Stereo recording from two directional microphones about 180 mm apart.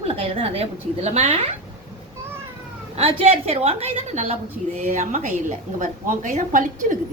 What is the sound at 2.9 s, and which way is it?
A woman's voice, 30° right (ahead or behind).